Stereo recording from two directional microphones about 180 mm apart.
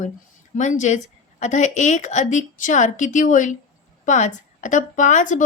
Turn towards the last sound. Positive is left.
turn(degrees=45)  # may be behind; listen again after turning